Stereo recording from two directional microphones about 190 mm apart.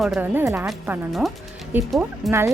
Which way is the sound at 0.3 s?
10° right (ahead or behind).